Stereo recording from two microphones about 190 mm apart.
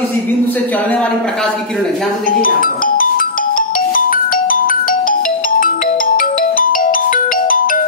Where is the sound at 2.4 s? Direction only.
45° left (ahead or behind).